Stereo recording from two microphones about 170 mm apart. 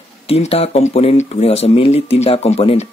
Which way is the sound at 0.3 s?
35° left (ahead or behind).